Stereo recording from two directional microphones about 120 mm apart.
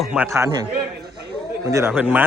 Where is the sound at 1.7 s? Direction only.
25° right (ahead or behind).